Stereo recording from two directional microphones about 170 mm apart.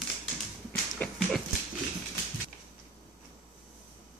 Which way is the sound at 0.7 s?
10° left (ahead or behind).